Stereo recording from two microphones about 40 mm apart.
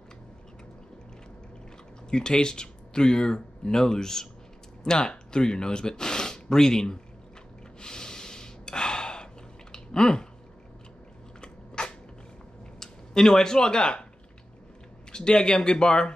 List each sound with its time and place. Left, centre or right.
2.0 s speech: centre
7.8 s gasp: centre
11.4 s biting: left
12.7 s speech: centre
15.1 s speech: left